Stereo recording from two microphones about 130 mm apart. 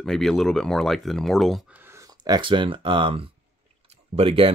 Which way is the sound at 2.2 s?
35° right (ahead or behind).